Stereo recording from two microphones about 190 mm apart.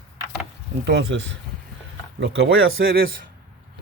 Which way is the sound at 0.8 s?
65° right (ahead or behind).